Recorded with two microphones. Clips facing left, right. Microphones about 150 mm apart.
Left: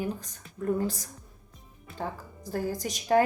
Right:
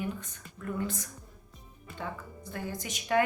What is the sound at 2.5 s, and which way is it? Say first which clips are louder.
Speech: left 7 dB; 40° left (ahead or behind).